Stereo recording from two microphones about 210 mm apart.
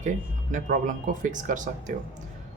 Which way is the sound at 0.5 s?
40° right (ahead or behind).